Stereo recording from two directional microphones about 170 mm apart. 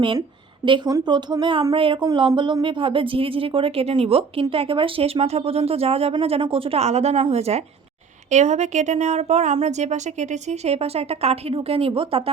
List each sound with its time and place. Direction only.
0.6 s speech: 30° right (ahead or behind)